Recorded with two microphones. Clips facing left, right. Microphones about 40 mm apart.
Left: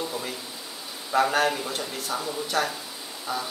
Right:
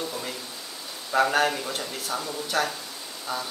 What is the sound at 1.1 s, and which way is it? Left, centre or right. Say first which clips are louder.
Speech: even; centre.